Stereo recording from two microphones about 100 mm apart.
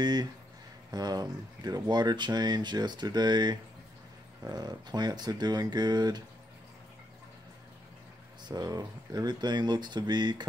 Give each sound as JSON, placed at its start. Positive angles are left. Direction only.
{"t": 0.0, "sound": "speech", "side_deg": -45}
{"t": 8.5, "sound": "speech", "side_deg": -40}